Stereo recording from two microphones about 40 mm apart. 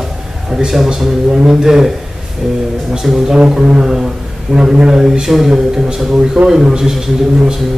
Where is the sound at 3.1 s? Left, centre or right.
Centre.